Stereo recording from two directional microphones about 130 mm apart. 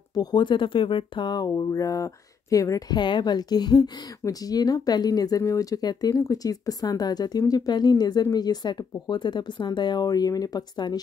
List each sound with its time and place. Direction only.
0.1 s a woman's voice: 30° left (ahead or behind)